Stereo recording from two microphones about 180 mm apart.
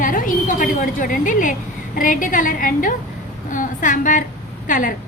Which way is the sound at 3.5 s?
45° left (ahead or behind).